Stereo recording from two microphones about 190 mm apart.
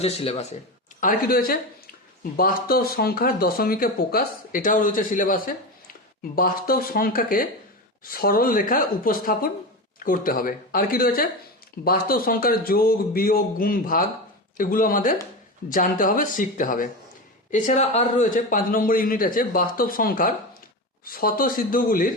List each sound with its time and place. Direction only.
0.0 s speech: 35° left (ahead or behind)
1.0 s speech: 50° left (ahead or behind)